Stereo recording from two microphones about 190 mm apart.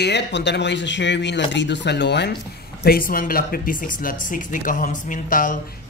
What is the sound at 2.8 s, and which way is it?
Speech, 50° left (ahead or behind).